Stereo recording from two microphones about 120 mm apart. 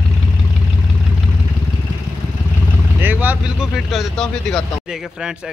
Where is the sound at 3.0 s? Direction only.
15° right (ahead or behind).